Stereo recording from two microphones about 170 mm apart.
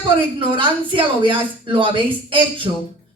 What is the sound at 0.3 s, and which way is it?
A woman's voice, 30° right (ahead or behind).